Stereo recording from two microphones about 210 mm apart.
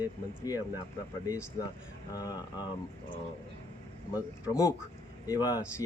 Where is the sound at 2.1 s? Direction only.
20° left (ahead or behind).